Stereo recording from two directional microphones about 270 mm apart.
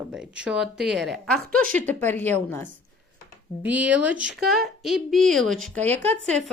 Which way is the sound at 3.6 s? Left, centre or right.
Centre.